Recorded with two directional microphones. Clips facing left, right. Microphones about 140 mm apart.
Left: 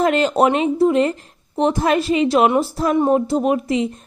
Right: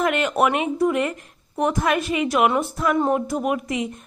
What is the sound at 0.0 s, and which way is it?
A woman's voice, 30° left (ahead or behind).